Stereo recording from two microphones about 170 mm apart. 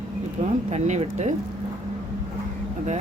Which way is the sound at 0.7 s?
40° right (ahead or behind).